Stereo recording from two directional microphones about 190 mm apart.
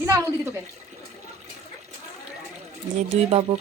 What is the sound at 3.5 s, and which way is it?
Speech, 30° right (ahead or behind).